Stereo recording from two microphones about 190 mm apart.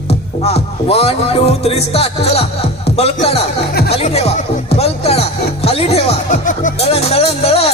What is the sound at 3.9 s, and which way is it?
Speech, 35° left (ahead or behind).